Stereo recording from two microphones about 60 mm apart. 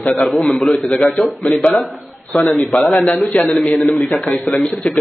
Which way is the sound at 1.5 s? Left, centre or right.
Centre.